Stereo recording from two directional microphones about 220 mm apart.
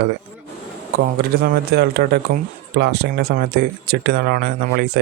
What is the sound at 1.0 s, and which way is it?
Speech, 45° right (ahead or behind).